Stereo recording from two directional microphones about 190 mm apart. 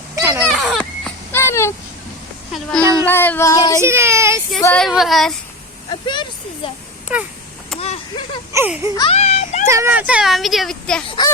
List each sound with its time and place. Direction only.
0.2 s children playing: 15° right (ahead or behind)
0.6 s a sound: centre (ahead or behind)
2.5 s speech: centre (ahead or behind)
2.8 s speech: 15° right (ahead or behind)
3.1 s a sound: 10° left (ahead or behind)
3.8 s speech: 15° right (ahead or behind)
4.6 s speech: 5° left (ahead or behind)
6.1 s speech: 25° left (ahead or behind)
7.1 s speech: 5° right (ahead or behind)
7.8 s a sound: 30° left (ahead or behind)
8.5 s speech: 10° right (ahead or behind)
9.0 s speech: 30° left (ahead or behind)
9.6 s speech: 15° right (ahead or behind); by 11.0 s 5° left (ahead or behind)